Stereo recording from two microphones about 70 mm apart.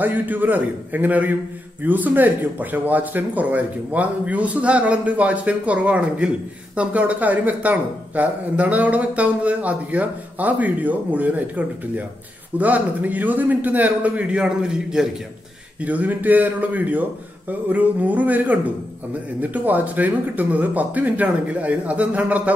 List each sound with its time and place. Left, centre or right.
0.0 s speech: right; by 15.0 s centre
15.8 s speech: right